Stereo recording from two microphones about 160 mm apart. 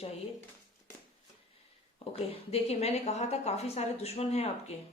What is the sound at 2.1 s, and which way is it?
Speech, 40° left (ahead or behind).